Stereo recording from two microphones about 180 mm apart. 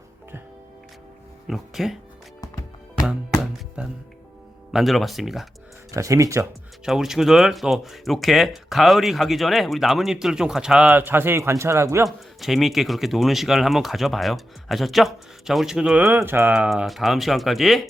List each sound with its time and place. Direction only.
1.5 s speech: centre (ahead or behind)
3.8 s speech: 5° right (ahead or behind)
5.9 s speech: 15° right (ahead or behind)
6.8 s speech: 5° right (ahead or behind)
12.0 s speech: centre (ahead or behind)